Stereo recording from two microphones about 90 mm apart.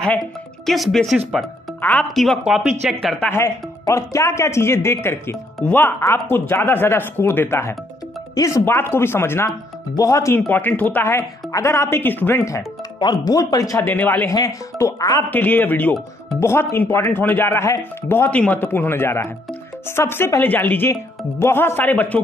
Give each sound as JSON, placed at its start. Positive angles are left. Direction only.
{"t": 0.7, "sound": "speech", "side_deg": 0}
{"t": 1.8, "sound": "a woman's voice", "side_deg": 15}
{"t": 2.4, "sound": "speech", "side_deg": -5}
{"t": 3.0, "sound": "speech", "side_deg": 5}
{"t": 3.3, "sound": "speech", "side_deg": 35}
{"t": 8.4, "sound": "speech", "side_deg": 40}
{"t": 8.6, "sound": "speech", "side_deg": 25}
{"t": 10.5, "sound": "speech", "side_deg": 20}
{"t": 13.0, "sound": "speech", "side_deg": 45}
{"t": 13.7, "sound": "speech", "side_deg": 20}
{"t": 14.3, "sound": "speech", "side_deg": 40}
{"t": 15.2, "sound": "speech", "side_deg": 20}
{"t": 17.5, "sound": "speech", "side_deg": 30}